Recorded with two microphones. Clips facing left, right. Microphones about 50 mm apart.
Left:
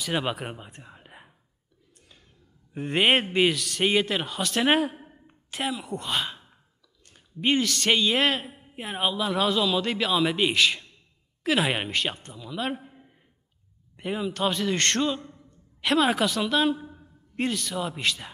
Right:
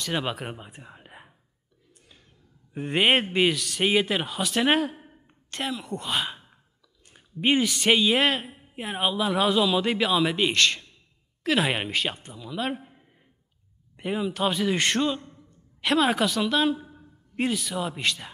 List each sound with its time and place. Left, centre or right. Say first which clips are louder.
0.0 s speech: left 1 dB; centre
2.0 s a sound: even; centre
2.7 s a man's voice: even; centre
13.9 s a man's voice: right 1 dB; centre